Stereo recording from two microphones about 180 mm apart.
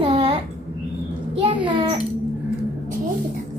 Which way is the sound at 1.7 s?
25° right (ahead or behind).